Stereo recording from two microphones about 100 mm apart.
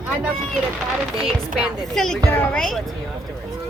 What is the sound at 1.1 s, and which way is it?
Speech, 5° right (ahead or behind).